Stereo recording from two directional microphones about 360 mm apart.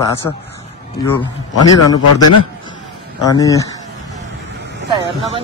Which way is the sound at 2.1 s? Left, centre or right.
Left.